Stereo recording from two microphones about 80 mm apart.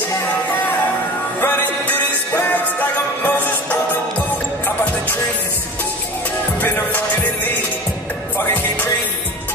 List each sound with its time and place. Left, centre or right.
1.4 s music: left
6.6 s music: left